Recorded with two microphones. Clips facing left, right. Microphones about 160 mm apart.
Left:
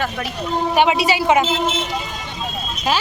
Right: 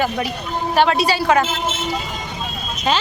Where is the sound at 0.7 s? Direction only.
15° left (ahead or behind).